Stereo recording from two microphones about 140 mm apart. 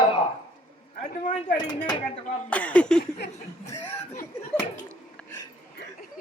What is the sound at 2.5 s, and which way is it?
Speech, 10° left (ahead or behind).